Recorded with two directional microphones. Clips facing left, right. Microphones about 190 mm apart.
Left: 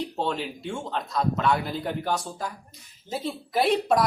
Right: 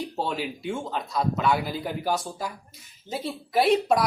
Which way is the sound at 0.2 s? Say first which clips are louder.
Even; 5° right (ahead or behind).